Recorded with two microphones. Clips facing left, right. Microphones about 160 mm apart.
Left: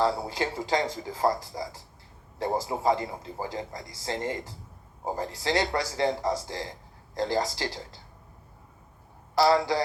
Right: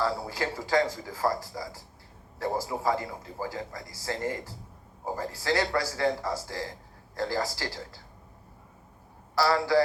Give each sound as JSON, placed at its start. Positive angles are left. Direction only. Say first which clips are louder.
{"t": 0.0, "sound": "speech", "louder": "left 3 dB", "side_deg": 20}
{"t": 9.3, "sound": "speech", "louder": "left 1 dB", "side_deg": 20}